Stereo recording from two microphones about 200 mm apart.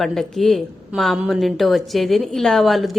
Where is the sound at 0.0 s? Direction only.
Centre (ahead or behind).